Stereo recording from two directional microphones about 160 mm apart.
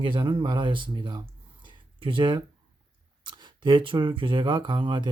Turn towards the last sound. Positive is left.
turn(degrees=-30)  # may be behind; listen again after turning